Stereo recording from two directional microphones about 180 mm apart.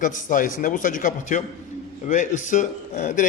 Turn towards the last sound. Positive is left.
turn(degrees=45)  # may be behind; listen again after turning